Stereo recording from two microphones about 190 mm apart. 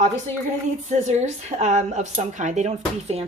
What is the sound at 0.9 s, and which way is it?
Speech, 35° right (ahead or behind).